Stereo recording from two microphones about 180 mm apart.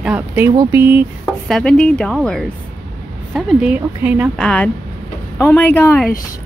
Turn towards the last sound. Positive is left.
turn(degrees=10)  # may be behind; listen again after turning